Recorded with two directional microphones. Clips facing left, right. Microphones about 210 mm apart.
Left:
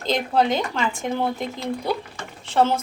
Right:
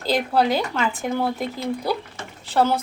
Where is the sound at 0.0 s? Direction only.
5° right (ahead or behind).